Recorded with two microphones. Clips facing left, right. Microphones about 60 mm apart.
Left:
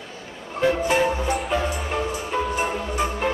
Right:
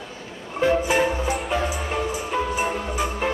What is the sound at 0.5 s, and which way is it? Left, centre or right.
Music, centre.